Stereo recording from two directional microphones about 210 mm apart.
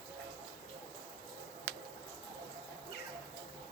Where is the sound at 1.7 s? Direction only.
50° right (ahead or behind).